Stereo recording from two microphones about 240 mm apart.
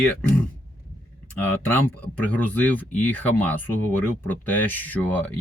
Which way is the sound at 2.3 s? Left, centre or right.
Centre.